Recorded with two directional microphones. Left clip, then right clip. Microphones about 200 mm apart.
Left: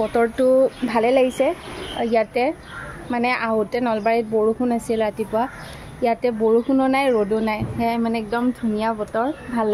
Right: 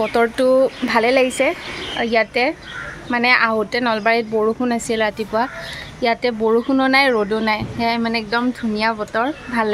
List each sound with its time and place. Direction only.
0.0 s speech: centre (ahead or behind)